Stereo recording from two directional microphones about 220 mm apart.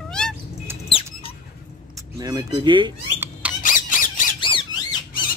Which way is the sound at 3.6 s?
35° left (ahead or behind).